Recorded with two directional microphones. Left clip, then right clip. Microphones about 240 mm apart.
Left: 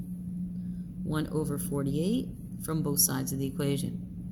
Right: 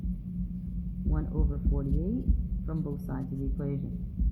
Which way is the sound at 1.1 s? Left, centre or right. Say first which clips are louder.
Left 6 dB; left.